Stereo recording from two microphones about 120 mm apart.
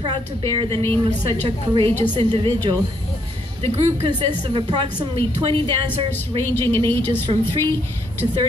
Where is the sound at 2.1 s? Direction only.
50° right (ahead or behind).